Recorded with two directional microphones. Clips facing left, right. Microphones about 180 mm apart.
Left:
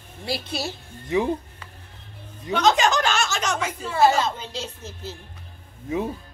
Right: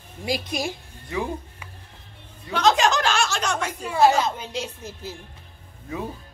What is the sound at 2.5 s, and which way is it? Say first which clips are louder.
Speech: even; centre (ahead or behind).